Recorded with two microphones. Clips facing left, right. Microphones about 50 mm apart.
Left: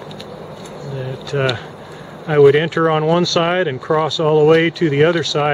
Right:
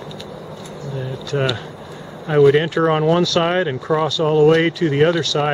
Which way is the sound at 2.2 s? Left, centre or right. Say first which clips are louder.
Left 2 dB; centre.